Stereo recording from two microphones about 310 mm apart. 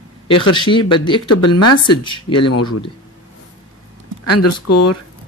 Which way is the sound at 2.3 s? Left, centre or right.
Left.